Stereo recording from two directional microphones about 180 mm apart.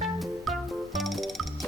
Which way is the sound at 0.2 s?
Centre (ahead or behind).